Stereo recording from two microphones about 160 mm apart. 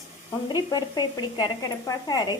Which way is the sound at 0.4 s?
25° left (ahead or behind).